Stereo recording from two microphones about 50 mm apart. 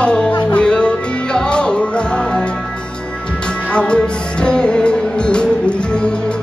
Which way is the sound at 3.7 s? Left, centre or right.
Left.